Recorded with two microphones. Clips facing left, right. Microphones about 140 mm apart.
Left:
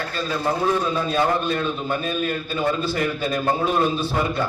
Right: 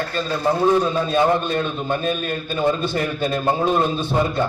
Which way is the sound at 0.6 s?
20° right (ahead or behind).